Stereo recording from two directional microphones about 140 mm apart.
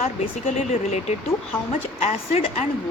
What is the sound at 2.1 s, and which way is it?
Speech, 55° left (ahead or behind).